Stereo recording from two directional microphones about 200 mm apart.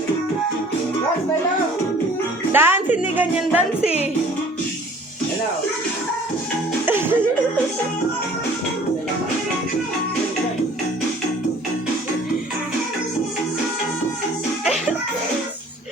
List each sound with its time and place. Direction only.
2.5 s music: 10° right (ahead or behind)
3.8 s speech: 30° left (ahead or behind)
6.8 s music: 10° right (ahead or behind)